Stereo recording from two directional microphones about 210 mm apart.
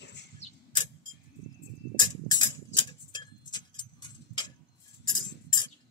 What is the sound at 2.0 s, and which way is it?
Tick-tock, 20° left (ahead or behind).